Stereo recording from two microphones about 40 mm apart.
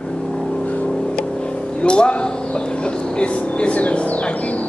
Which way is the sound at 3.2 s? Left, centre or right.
Left.